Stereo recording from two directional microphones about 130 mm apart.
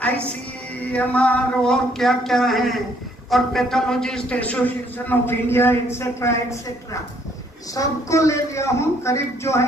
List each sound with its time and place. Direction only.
0.9 s a man's voice: 10° left (ahead or behind)
7.8 s a man's voice: 25° left (ahead or behind)